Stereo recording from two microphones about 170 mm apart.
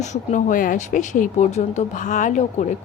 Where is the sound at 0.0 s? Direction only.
45° left (ahead or behind).